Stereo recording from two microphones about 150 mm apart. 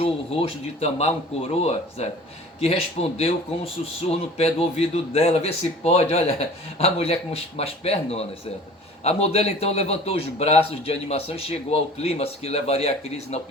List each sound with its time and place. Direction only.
0.0 s a man's voice: 40° left (ahead or behind)